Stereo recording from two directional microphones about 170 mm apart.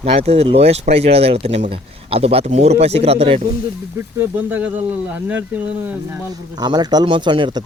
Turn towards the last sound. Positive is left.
turn(degrees=-25)  # may be behind; listen again after turning